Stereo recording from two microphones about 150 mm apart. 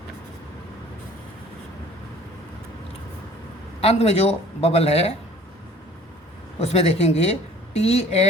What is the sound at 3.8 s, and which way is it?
A woman's voice, 45° left (ahead or behind).